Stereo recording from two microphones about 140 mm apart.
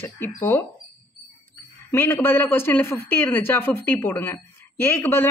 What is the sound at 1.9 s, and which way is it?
Speech, 15° left (ahead or behind).